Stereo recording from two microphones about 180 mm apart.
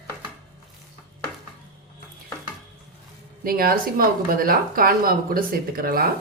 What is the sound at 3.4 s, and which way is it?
Speech, 55° right (ahead or behind).